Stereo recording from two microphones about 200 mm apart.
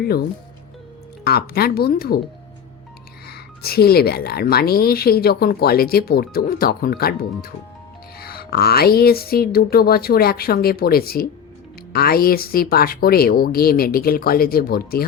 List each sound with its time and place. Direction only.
0.0 s speech: 50° left (ahead or behind)
3.2 s speech: 50° left (ahead or behind)